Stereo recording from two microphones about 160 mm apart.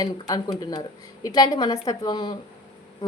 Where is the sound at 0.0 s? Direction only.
25° left (ahead or behind).